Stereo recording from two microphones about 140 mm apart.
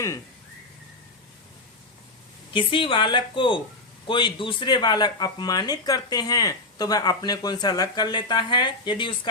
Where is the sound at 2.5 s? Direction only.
40° left (ahead or behind).